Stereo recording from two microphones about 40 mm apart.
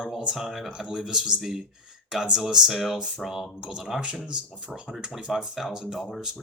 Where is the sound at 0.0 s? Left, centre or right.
Centre.